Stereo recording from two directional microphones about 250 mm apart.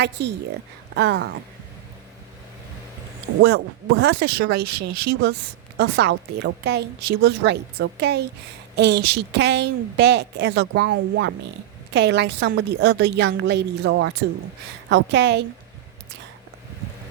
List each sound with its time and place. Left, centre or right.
0.0 s a woman's voice: right
3.4 s a woman's voice: right
4.6 s speech: right
5.7 s a woman's voice: right